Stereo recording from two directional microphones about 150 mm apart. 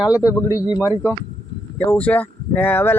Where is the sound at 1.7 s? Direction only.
10° left (ahead or behind).